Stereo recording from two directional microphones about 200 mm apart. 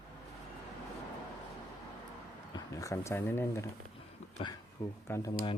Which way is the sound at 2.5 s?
15° left (ahead or behind).